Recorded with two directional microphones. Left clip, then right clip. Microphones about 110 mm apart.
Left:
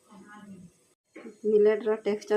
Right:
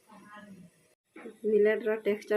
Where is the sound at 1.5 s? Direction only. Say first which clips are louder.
Left 3 dB; 25° left (ahead or behind).